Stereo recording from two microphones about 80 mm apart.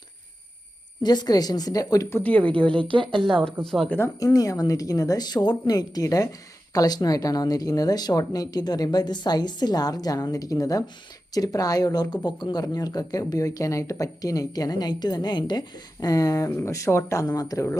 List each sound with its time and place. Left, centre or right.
1.0 s speech: left
2.0 s speech: left
2.7 s speech: right
3.4 s speech: centre
3.8 s speech: left
4.2 s speech: left
16.6 s speech: left